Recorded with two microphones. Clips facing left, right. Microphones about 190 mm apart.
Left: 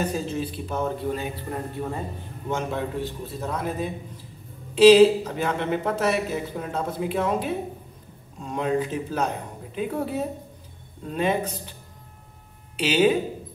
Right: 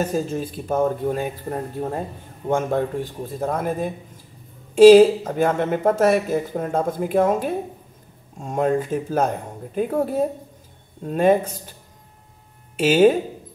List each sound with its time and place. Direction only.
0.0 s speech: 45° right (ahead or behind)
12.7 s speech: 45° right (ahead or behind)